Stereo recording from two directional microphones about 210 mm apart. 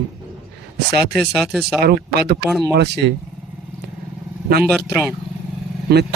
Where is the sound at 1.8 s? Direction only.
50° right (ahead or behind).